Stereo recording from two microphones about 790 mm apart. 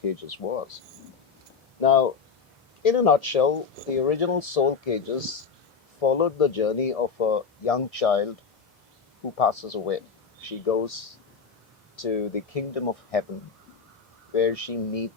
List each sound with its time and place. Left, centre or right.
0.0 s speech: left
1.8 s speech: left
9.4 s speech: left
14.3 s speech: left